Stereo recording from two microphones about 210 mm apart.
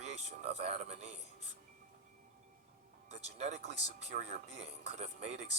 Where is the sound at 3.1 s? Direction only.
30° right (ahead or behind).